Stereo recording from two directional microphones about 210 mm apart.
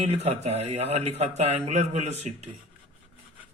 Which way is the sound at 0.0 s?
30° right (ahead or behind).